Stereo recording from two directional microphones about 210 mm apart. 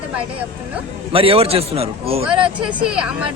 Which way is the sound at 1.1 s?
25° right (ahead or behind).